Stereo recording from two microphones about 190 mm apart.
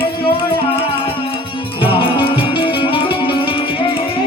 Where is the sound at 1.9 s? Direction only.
25° left (ahead or behind).